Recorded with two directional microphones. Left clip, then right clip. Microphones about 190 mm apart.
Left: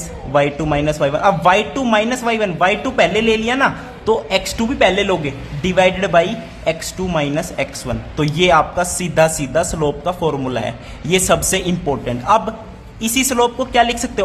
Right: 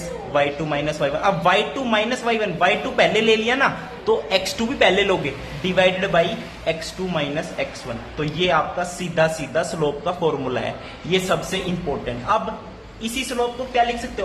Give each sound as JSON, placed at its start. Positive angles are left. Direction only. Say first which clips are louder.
{"t": 0.3, "sound": "a man's voice", "louder": "left 5 dB", "side_deg": 30}
{"t": 11.1, "sound": "a man's voice", "louder": "left 6 dB", "side_deg": 40}